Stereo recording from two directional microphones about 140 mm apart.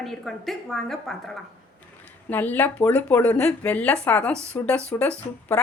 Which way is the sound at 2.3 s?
10° left (ahead or behind).